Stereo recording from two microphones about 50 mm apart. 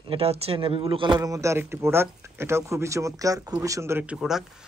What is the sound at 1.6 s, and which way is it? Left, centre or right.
Speech, right.